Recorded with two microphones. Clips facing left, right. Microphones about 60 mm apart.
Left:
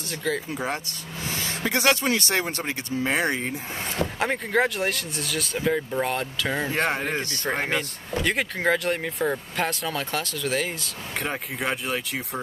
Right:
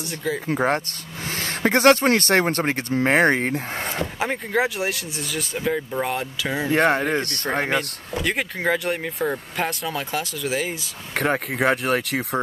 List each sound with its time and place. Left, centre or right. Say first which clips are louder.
0.1 s speech: even; centre
0.6 s speech: right 7 dB; right
4.2 s speech: even; centre
6.7 s speech: right 6 dB; right
7.7 s speech: right 3 dB; centre
11.1 s speech: right 8 dB; right